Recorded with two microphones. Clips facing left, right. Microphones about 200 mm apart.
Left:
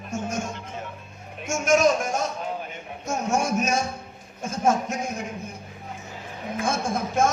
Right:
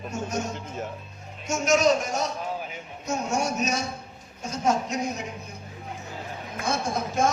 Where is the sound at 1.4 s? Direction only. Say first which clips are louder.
Left 2 dB; 50° left (ahead or behind).